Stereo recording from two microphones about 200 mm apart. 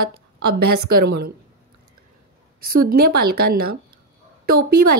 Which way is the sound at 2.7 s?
45° right (ahead or behind).